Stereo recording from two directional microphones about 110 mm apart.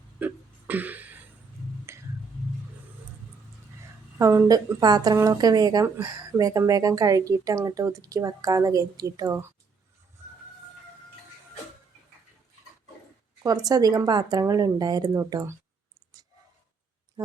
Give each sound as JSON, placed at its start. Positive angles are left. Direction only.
{"t": 0.2, "sound": "a sound", "side_deg": -15}
{"t": 4.2, "sound": "speech", "side_deg": -30}
{"t": 13.4, "sound": "speech", "side_deg": -35}